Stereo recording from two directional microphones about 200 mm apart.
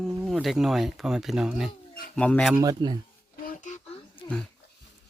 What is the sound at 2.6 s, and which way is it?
Speech, 20° right (ahead or behind).